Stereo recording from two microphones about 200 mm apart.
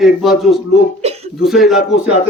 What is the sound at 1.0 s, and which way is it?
Speech, 30° right (ahead or behind).